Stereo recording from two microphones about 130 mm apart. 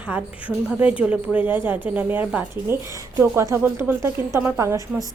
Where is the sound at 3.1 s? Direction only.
25° right (ahead or behind).